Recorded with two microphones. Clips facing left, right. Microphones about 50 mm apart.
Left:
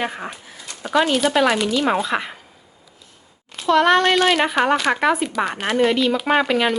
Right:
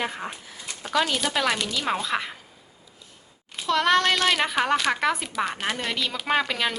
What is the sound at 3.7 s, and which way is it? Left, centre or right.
Speech, centre.